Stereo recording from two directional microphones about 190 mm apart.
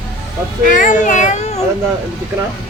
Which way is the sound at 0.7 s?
45° left (ahead or behind).